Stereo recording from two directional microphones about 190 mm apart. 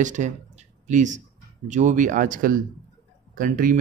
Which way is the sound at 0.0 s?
40° right (ahead or behind).